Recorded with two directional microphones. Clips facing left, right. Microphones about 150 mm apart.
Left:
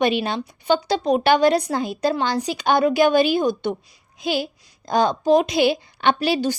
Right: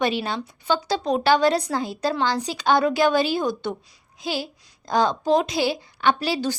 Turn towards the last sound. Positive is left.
turn(degrees=15)  # may be behind; listen again after turning